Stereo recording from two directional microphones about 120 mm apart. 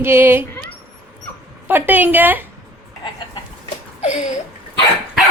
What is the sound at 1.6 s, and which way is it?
Speech, 15° right (ahead or behind).